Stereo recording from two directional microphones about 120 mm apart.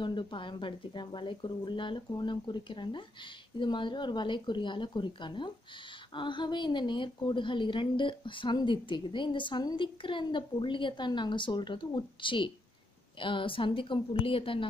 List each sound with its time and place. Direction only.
0.0 s a woman's voice: 40° left (ahead or behind)